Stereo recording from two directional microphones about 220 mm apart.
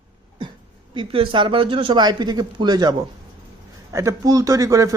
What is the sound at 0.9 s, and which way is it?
Speech, 25° right (ahead or behind).